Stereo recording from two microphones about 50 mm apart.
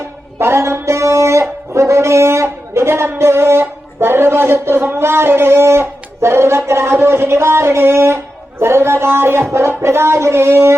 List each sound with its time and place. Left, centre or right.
0.3 s music: right